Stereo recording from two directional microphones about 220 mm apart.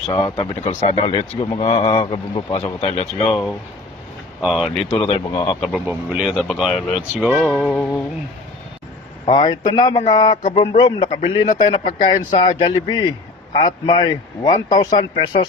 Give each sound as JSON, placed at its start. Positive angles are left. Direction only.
{"t": 0.1, "sound": "speech", "side_deg": 25}
{"t": 4.4, "sound": "speech", "side_deg": 0}
{"t": 4.9, "sound": "speech", "side_deg": 20}
{"t": 5.9, "sound": "speech", "side_deg": -5}
{"t": 9.2, "sound": "speech", "side_deg": 20}